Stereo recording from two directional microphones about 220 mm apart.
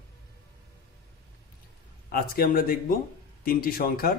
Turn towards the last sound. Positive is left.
turn(degrees=40)  # may be behind; listen again after turning